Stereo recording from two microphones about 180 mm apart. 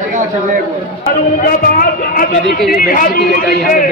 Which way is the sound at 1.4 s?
55° left (ahead or behind).